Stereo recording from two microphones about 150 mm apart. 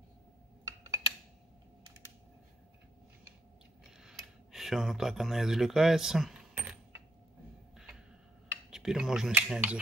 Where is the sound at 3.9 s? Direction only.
5° right (ahead or behind).